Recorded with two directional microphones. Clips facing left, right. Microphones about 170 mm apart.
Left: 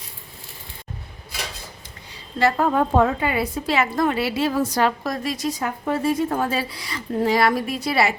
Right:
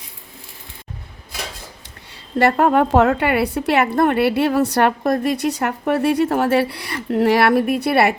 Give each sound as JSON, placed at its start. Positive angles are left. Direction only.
{"t": 2.1, "sound": "a woman's voice", "side_deg": -60}